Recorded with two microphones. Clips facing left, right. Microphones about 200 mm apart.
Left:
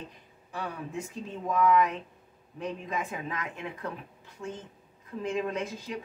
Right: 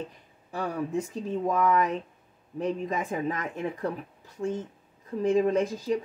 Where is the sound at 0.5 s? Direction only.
40° right (ahead or behind).